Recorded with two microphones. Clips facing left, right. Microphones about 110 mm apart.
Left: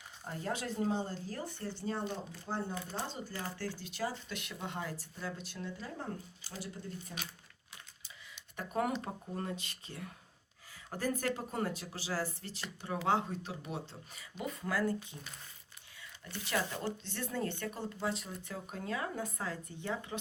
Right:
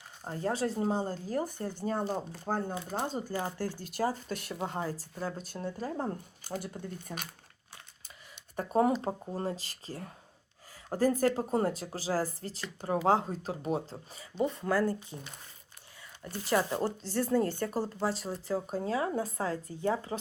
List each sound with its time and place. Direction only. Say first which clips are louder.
0.3 s speech: right 6 dB; 35° right (ahead or behind); by 7.3 s 55° right (ahead or behind)
8.5 s speech: right 7 dB; 35° right (ahead or behind)